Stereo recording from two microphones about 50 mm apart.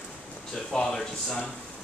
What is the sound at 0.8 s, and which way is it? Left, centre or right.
Speech, centre.